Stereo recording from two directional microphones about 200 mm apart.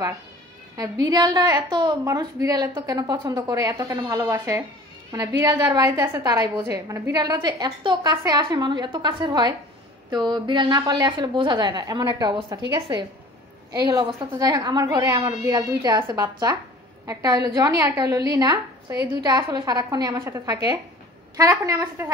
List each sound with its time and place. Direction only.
0.7 s a woman's voice: 20° right (ahead or behind)